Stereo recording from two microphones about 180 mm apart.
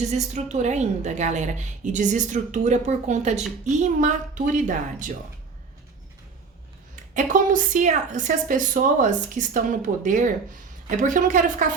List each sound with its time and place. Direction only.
0.0 s a woman's voice: 40° right (ahead or behind)
6.9 s a woman's voice: 45° right (ahead or behind)